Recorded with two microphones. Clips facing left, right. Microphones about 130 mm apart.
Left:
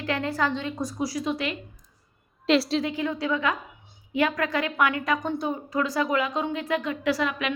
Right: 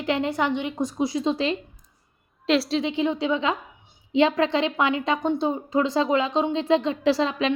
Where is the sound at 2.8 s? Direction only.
20° right (ahead or behind).